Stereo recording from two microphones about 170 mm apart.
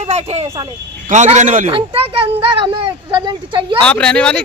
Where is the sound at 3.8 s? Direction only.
5° left (ahead or behind).